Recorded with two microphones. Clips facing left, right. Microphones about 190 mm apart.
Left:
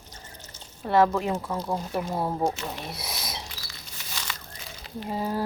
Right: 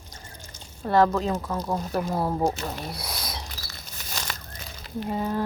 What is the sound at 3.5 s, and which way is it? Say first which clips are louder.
Crumpling: right 2 dB; 45° right (ahead or behind).